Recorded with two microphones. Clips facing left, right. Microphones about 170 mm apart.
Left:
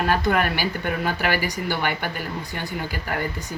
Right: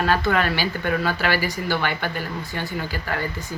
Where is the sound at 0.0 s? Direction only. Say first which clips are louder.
Even; 15° left (ahead or behind).